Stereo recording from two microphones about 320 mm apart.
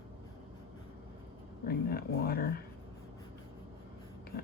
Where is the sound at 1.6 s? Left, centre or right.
Left.